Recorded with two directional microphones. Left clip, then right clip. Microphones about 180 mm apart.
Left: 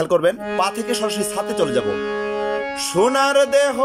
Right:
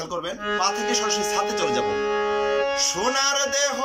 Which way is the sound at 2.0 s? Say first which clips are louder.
Even; 25° left (ahead or behind).